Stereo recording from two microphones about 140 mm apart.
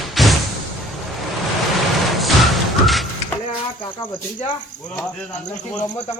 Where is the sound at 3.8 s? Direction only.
40° left (ahead or behind).